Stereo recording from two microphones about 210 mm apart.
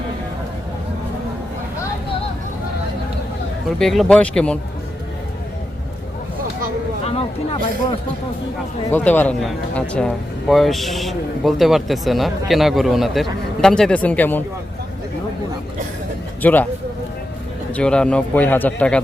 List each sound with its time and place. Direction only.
3.8 s a man's voice: centre (ahead or behind)
7.0 s a sound: 30° left (ahead or behind)
8.9 s a man's voice: 10° left (ahead or behind)
16.4 s speech: 10° left (ahead or behind)
17.7 s a man's voice: 5° left (ahead or behind)